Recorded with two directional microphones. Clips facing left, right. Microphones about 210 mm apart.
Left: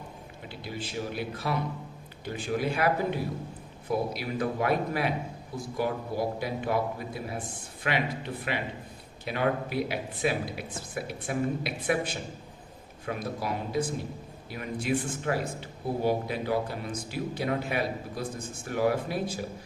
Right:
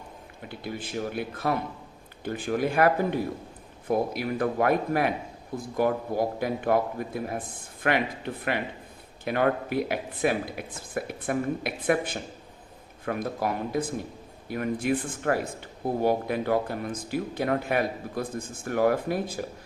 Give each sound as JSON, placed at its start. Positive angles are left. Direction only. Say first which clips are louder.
{"t": 0.4, "sound": "speech", "louder": "right 3 dB", "side_deg": -55}